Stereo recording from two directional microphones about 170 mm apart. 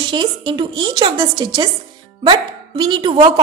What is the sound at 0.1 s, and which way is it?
A woman's voice, 30° right (ahead or behind).